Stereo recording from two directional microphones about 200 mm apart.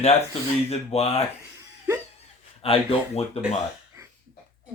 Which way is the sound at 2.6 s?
30° left (ahead or behind).